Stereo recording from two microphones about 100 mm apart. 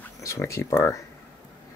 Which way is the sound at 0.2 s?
30° left (ahead or behind).